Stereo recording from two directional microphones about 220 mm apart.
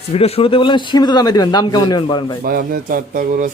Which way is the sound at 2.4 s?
40° right (ahead or behind).